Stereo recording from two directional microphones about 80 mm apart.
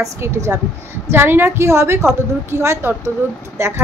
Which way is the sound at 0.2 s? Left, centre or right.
Right.